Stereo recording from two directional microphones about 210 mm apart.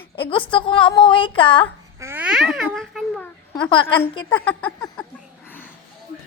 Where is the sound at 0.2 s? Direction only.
25° left (ahead or behind).